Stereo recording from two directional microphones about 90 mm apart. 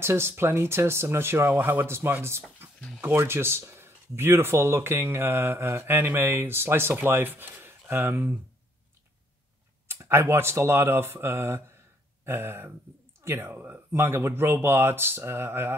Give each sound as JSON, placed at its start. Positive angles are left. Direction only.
{"t": 0.0, "sound": "speech", "side_deg": -30}
{"t": 9.8, "sound": "speech", "side_deg": -30}